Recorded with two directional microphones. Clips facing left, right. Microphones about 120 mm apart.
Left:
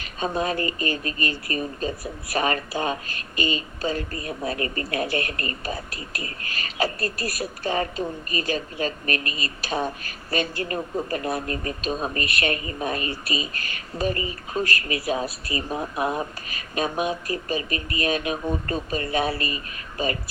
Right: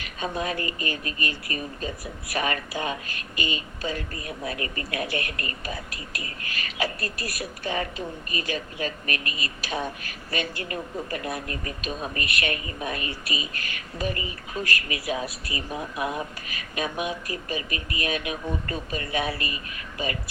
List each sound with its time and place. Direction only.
0.0 s a woman's voice: 35° left (ahead or behind)